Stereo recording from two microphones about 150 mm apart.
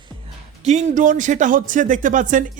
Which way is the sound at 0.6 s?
55° right (ahead or behind).